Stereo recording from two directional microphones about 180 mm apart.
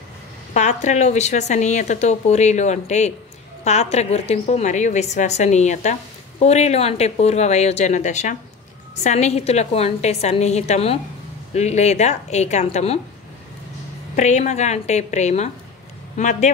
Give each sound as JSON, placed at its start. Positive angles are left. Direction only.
{"t": 0.5, "sound": "speech", "side_deg": 40}
{"t": 14.1, "sound": "speech", "side_deg": 40}